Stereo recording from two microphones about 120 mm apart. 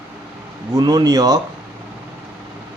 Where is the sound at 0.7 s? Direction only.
35° right (ahead or behind).